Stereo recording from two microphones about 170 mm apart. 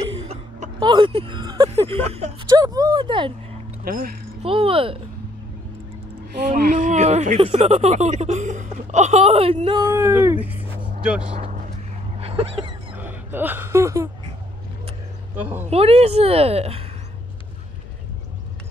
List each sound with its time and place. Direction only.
0.7 s speech: 25° right (ahead or behind)
3.8 s speech: 60° right (ahead or behind)
4.4 s speech: 35° right (ahead or behind)
6.5 s speech: 50° right (ahead or behind); by 10.6 s 10° right (ahead or behind)
11.3 s vehicle: 35° right (ahead or behind)
12.2 s a sound: 35° right (ahead or behind)
12.9 s speech: 10° right (ahead or behind)
15.7 s speech: 35° right (ahead or behind)